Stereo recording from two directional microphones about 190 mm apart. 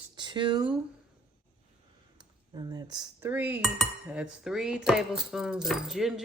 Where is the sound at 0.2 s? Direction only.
25° right (ahead or behind).